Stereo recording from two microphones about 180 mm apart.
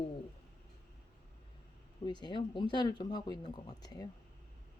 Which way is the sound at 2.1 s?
25° left (ahead or behind).